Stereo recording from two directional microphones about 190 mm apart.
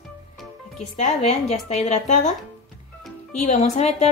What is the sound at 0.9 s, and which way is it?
Speech, 40° left (ahead or behind).